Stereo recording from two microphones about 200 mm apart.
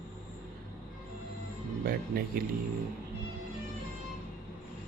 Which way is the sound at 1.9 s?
50° right (ahead or behind).